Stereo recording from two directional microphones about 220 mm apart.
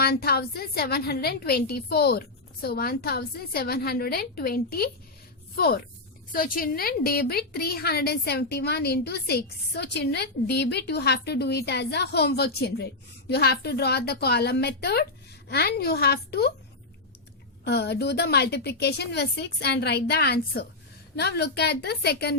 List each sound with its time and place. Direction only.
0.0 s a woman's voice: 45° left (ahead or behind)
17.7 s a woman's voice: 45° left (ahead or behind)